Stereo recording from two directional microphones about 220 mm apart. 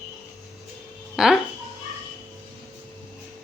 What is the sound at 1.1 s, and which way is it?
Speech, centre (ahead or behind).